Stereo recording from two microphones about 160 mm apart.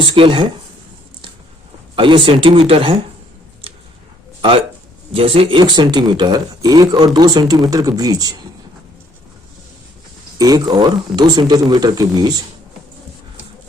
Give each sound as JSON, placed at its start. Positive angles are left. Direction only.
{"t": 0.0, "sound": "speech", "side_deg": -35}
{"t": 2.0, "sound": "speech", "side_deg": -30}
{"t": 4.4, "sound": "a sound", "side_deg": -30}
{"t": 5.1, "sound": "speech", "side_deg": -35}
{"t": 10.3, "sound": "speech", "side_deg": -25}